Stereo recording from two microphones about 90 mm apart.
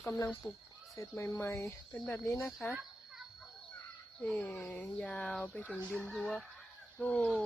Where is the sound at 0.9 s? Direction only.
35° left (ahead or behind).